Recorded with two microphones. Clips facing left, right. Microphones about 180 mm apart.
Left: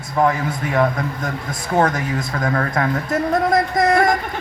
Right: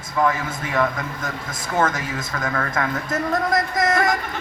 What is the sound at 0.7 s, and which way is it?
Speech, 40° left (ahead or behind).